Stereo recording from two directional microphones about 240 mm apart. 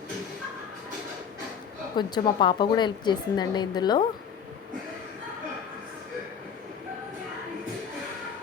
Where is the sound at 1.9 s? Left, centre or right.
Centre.